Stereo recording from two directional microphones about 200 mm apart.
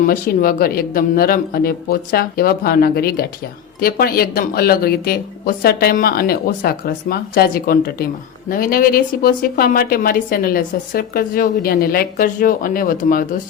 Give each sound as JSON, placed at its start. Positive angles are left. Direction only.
{"t": 0.0, "sound": "a woman's voice", "side_deg": 45}